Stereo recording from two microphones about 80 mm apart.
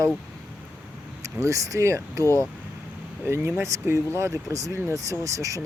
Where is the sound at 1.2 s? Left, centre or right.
Right.